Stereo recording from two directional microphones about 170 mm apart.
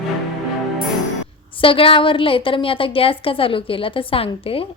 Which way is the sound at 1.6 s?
30° left (ahead or behind).